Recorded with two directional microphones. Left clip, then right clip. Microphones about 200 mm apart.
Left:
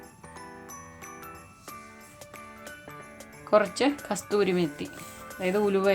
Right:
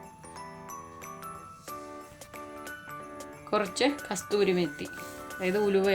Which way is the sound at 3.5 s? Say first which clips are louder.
Left 4 dB; 40° left (ahead or behind).